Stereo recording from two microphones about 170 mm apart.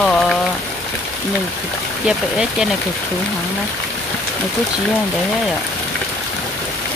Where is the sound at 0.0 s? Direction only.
5° left (ahead or behind).